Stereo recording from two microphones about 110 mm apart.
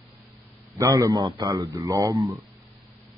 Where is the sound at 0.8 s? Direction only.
30° right (ahead or behind).